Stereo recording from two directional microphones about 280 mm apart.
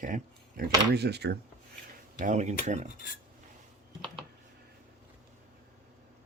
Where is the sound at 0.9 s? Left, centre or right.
Right.